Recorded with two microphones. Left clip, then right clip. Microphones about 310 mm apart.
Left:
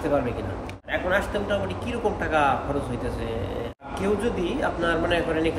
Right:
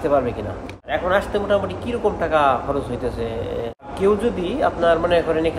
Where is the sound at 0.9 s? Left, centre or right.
Centre.